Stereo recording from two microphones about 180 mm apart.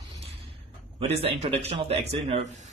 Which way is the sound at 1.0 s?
35° right (ahead or behind).